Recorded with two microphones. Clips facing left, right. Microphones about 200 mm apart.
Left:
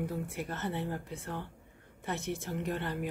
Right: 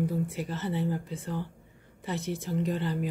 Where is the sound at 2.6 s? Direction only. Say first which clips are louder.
Right 6 dB; 55° left (ahead or behind).